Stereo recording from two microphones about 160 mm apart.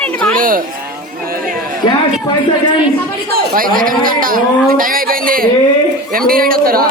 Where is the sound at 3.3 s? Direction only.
65° right (ahead or behind).